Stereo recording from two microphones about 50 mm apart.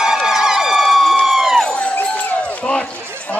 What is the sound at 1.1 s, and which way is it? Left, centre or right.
Run, centre.